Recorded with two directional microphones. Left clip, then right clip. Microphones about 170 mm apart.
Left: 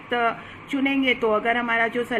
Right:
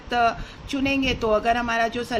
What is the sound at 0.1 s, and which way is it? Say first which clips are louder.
A woman's voice: right 2 dB; 25° right (ahead or behind).